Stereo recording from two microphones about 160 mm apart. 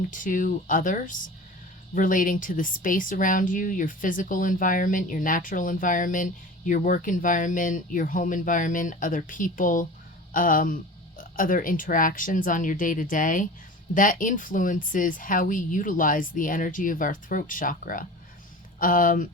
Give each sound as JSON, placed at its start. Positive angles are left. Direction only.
{"t": 0.1, "sound": "speech", "side_deg": 55}